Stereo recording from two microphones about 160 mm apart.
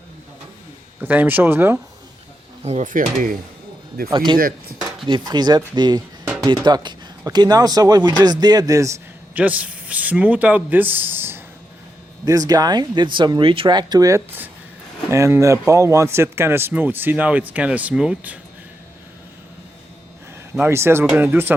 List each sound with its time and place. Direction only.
1.0 s speech: 10° right (ahead or behind)
2.6 s speech: 50° right (ahead or behind)
4.1 s a man's voice: 30° right (ahead or behind); by 18.3 s 10° right (ahead or behind)
20.7 s speech: 15° right (ahead or behind)